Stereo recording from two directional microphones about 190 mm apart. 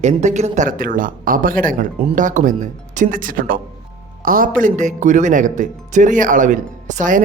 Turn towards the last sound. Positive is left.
turn(degrees=-45)  # may be behind; listen again after turning